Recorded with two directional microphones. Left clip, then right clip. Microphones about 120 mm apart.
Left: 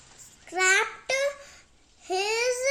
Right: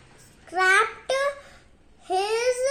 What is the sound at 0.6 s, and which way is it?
Child singing, 40° left (ahead or behind).